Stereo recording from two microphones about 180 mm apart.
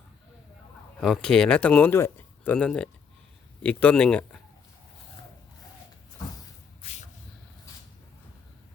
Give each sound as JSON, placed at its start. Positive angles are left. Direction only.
{"t": 0.9, "sound": "speech", "side_deg": 5}
{"t": 6.8, "sound": "spray", "side_deg": 40}